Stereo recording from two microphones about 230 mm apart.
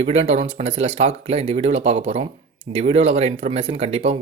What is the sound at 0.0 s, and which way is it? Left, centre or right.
Speech, right.